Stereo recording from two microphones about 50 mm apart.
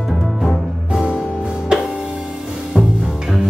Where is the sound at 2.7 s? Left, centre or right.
Centre.